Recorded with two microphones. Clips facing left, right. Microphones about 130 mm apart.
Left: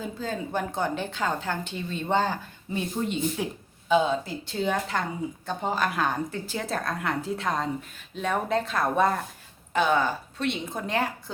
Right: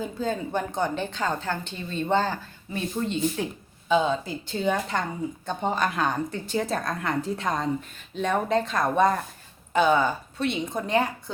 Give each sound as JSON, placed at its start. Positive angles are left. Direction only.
{"t": 0.2, "sound": "a woman's voice", "side_deg": 5}